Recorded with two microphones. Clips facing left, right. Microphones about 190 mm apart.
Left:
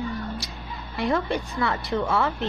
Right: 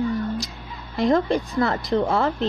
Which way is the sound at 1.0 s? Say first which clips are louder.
Right 5 dB; 35° right (ahead or behind).